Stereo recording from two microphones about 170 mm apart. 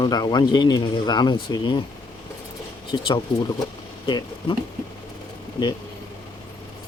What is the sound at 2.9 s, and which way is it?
Speech, 30° left (ahead or behind).